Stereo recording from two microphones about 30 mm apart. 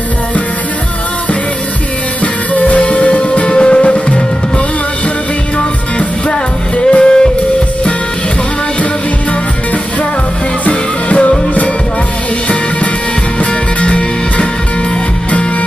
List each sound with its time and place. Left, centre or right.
2.5 s music: left
3.8 s music: left
6.8 s music: left
10.6 s music: left
13.4 s music: left